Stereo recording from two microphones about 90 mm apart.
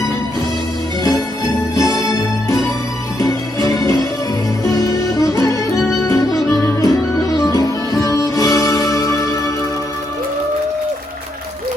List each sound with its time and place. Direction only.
1.7 s music: 40° left (ahead or behind)